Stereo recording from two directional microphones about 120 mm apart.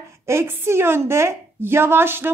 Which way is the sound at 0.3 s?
20° right (ahead or behind).